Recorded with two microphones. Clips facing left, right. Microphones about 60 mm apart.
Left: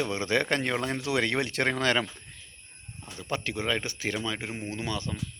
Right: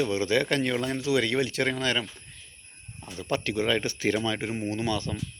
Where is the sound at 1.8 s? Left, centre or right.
Left.